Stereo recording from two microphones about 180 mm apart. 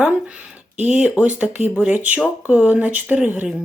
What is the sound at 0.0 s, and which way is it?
Speech, 10° right (ahead or behind).